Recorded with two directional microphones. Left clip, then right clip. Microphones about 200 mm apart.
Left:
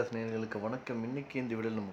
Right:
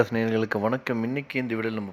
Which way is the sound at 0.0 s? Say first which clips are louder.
Right 12 dB; 35° right (ahead or behind).